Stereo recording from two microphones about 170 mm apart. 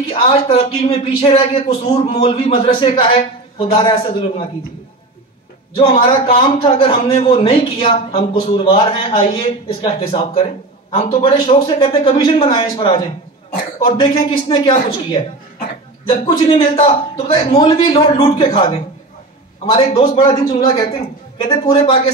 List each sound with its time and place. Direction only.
0.0 s a man's voice: 35° left (ahead or behind)
5.8 s a man's voice: 30° left (ahead or behind)
16.1 s a man's voice: 35° left (ahead or behind)